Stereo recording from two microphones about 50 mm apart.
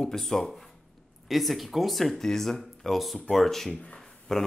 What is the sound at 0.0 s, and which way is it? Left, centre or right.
Speech, centre.